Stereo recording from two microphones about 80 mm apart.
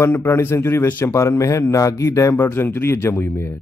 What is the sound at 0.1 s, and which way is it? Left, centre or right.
A man's voice, left.